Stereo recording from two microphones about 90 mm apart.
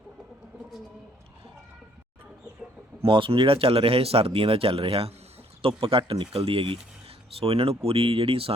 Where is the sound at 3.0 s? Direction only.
70° right (ahead or behind).